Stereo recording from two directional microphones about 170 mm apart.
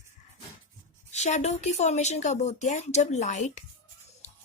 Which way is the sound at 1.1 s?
40° left (ahead or behind).